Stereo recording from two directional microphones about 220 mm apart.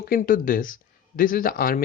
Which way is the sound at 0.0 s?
40° left (ahead or behind).